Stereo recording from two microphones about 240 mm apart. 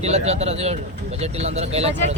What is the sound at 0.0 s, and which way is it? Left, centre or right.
Speech, right.